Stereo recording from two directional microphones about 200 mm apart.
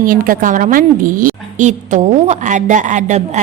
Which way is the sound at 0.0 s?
45° right (ahead or behind).